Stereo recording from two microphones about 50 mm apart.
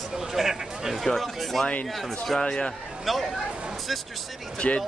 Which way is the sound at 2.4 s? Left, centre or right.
Centre.